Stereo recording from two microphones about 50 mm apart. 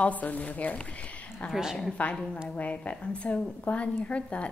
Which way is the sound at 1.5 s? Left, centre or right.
Centre.